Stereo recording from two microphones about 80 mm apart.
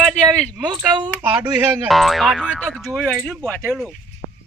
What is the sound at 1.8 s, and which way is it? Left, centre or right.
Speech, centre.